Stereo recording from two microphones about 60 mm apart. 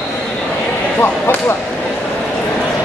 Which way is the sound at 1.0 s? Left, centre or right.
Left.